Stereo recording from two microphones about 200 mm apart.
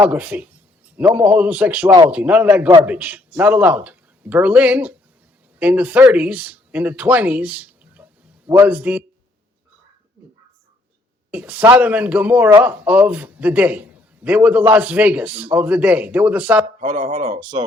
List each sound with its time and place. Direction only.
0.0 s a man's voice: 10° right (ahead or behind)
11.3 s a man's voice: 10° right (ahead or behind)
16.8 s speech: 30° right (ahead or behind)